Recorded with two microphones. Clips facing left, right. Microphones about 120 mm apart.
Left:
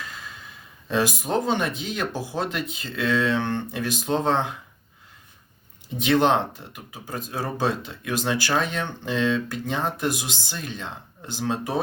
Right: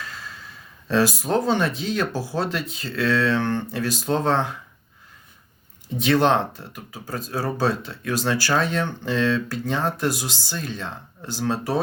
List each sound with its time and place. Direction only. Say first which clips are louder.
0.9 s speech: right 3 dB; 15° left (ahead or behind)
6.0 s speech: right 1 dB; 15° left (ahead or behind)